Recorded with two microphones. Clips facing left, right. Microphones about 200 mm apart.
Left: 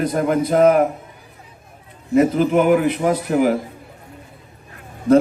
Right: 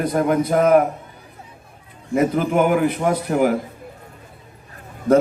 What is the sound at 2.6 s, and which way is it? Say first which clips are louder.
Speech: even; 55° right (ahead or behind).